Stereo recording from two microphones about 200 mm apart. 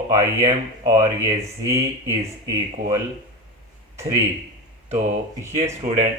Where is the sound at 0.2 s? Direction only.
15° right (ahead or behind).